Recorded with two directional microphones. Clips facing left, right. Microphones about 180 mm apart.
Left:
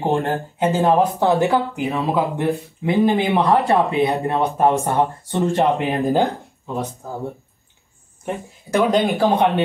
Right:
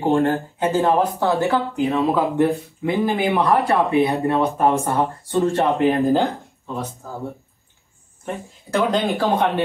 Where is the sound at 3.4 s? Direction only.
20° left (ahead or behind).